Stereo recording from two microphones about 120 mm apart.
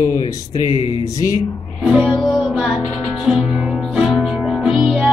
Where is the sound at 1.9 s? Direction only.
10° right (ahead or behind).